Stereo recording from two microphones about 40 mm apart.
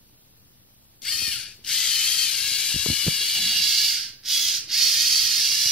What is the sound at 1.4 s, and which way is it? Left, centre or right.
Ratchet, left.